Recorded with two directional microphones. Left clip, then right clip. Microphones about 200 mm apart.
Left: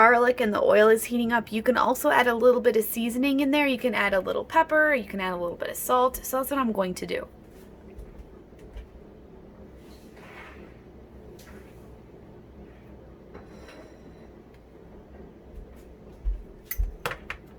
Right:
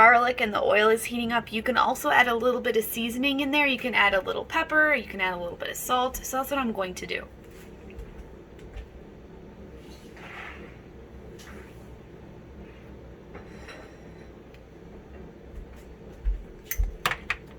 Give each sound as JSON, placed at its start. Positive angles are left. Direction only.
{"t": 0.0, "sound": "a woman's voice", "side_deg": 60}